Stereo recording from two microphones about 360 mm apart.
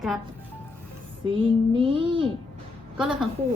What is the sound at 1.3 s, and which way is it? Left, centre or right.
Child singing, centre.